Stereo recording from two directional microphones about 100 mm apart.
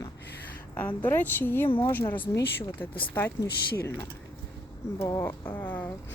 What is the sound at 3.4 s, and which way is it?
Speech, 25° left (ahead or behind).